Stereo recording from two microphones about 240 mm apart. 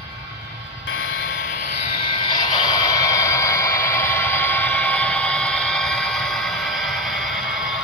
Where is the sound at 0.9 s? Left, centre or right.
Left.